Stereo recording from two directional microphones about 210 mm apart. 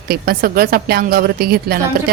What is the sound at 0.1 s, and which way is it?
A woman's voice, 45° right (ahead or behind).